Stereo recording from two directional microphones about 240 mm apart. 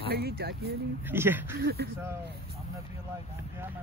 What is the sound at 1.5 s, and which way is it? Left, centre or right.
Speech, right.